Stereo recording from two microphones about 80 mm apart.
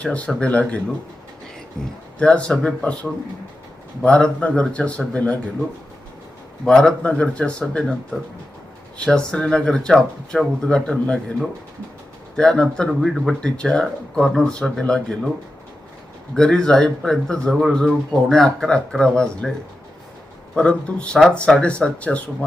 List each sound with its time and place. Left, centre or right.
0.0 s speech: centre
1.7 s speech: centre
6.7 s speech: centre
9.0 s speech: centre
13.4 s speech: centre
16.3 s speech: centre
20.6 s speech: centre